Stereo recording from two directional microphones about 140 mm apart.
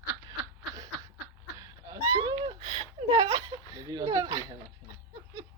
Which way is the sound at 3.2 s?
25° right (ahead or behind).